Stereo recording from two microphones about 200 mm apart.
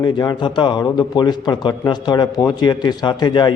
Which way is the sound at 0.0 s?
20° left (ahead or behind).